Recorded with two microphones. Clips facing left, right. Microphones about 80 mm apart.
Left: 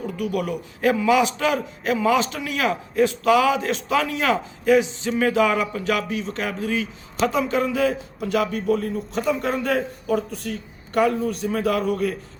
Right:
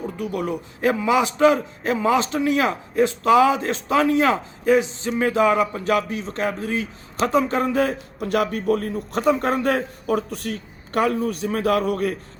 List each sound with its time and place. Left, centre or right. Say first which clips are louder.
0.2 s a man's voice: left 1 dB; right